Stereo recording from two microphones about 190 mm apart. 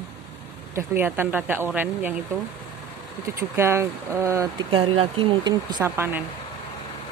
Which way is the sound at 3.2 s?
15° right (ahead or behind).